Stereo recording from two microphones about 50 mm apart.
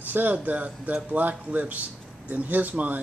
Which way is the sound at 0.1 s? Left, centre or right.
Right.